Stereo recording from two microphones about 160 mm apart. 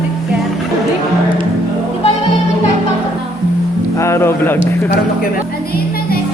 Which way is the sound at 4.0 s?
15° left (ahead or behind).